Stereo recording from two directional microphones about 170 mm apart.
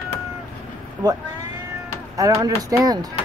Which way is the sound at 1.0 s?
25° right (ahead or behind).